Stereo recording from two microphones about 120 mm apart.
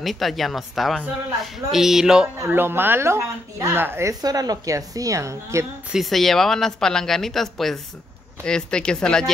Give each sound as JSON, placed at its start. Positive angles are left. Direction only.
{"t": 0.0, "sound": "speech", "side_deg": 0}
{"t": 2.3, "sound": "speech", "side_deg": -20}
{"t": 4.1, "sound": "speech", "side_deg": -30}
{"t": 5.9, "sound": "speech", "side_deg": 0}